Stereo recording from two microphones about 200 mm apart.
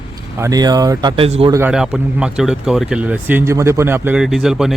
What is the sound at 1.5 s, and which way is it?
A man's voice, 5° right (ahead or behind).